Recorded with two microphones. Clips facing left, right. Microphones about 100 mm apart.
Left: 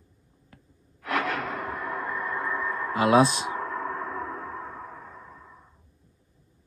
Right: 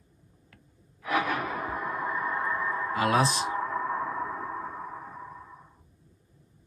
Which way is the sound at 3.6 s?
10° right (ahead or behind).